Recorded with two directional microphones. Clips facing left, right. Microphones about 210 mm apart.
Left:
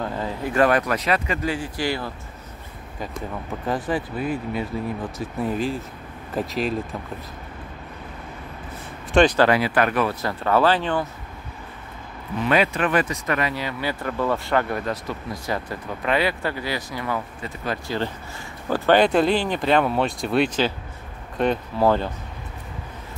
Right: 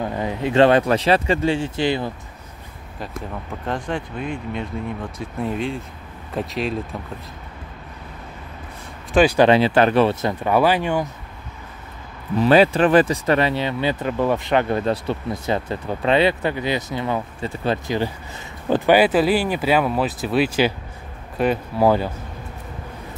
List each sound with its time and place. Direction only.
0.0 s speech: 15° right (ahead or behind)
3.6 s speech: 5° left (ahead or behind)
9.1 s speech: 10° right (ahead or behind)
9.5 s speech: 25° right (ahead or behind)
10.4 s speech: 15° right (ahead or behind)
12.4 s speech: 30° right (ahead or behind)
18.9 s speech: 5° right (ahead or behind)